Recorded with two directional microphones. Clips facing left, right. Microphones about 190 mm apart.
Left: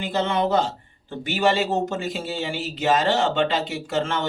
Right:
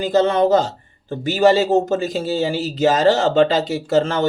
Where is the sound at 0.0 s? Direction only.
40° right (ahead or behind).